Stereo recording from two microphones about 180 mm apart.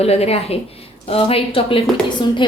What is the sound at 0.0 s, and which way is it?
A woman's voice, 35° left (ahead or behind).